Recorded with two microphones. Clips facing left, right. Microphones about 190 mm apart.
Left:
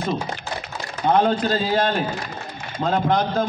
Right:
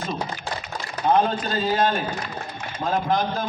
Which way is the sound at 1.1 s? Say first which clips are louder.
Left 3 dB; 75° left (ahead or behind).